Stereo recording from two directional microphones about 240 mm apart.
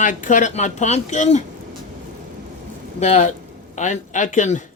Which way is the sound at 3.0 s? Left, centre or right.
Left.